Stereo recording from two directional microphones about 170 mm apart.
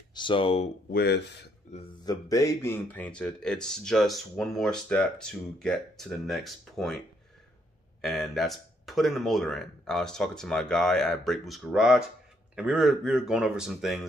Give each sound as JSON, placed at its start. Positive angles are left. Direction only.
{"t": 0.1, "sound": "speech", "side_deg": 30}
{"t": 0.9, "sound": "speech", "side_deg": 75}
{"t": 2.0, "sound": "speech", "side_deg": 20}
{"t": 8.0, "sound": "speech", "side_deg": 0}